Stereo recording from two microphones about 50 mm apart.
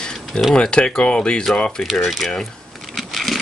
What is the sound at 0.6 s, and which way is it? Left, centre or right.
Speech, centre.